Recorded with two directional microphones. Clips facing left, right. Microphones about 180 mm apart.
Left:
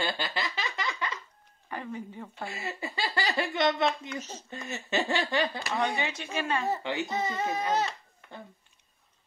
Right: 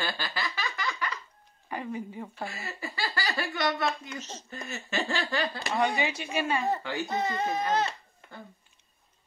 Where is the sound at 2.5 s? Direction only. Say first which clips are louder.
Left 2 dB; 20° left (ahead or behind).